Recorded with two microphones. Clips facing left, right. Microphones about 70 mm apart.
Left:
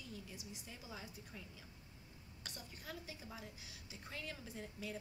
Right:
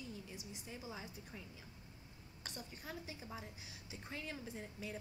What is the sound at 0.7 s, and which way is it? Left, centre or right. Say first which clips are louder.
A woman's voice: right 5 dB; centre.